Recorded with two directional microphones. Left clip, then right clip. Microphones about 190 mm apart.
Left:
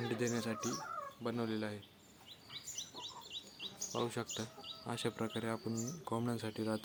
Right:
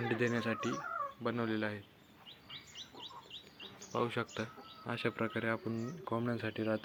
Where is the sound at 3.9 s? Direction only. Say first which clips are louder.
Right 4 dB; 5° left (ahead or behind).